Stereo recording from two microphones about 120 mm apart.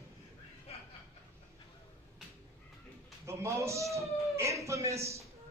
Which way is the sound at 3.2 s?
25° right (ahead or behind).